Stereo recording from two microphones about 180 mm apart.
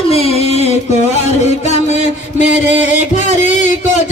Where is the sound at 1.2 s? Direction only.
40° left (ahead or behind).